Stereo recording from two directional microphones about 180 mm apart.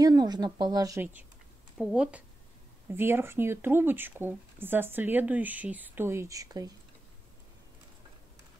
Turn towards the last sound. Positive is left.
turn(degrees=-20)  # may be behind; listen again after turning